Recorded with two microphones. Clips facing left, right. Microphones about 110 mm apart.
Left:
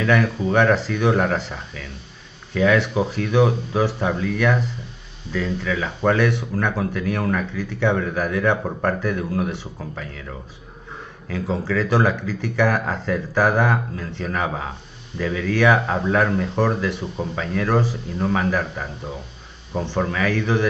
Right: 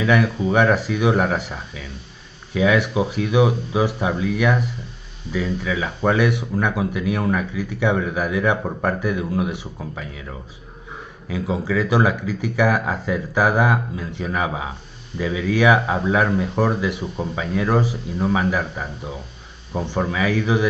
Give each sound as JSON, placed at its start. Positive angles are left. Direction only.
{"t": 0.0, "sound": "speech", "side_deg": -10}
{"t": 11.2, "sound": "speech", "side_deg": -10}